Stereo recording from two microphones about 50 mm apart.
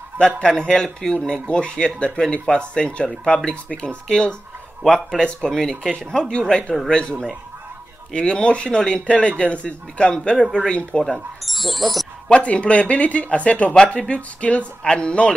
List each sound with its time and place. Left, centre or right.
0.4 s speech: centre
11.4 s speech: centre
12.3 s speech: left